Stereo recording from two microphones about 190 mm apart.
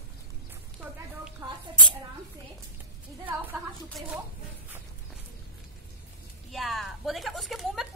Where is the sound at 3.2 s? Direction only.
10° right (ahead or behind).